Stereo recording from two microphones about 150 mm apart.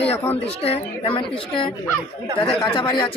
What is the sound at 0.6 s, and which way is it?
A woman's voice, 40° left (ahead or behind).